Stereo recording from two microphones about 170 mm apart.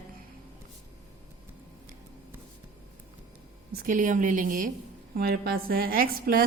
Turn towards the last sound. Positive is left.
turn(degrees=-60)  # may be behind; listen again after turning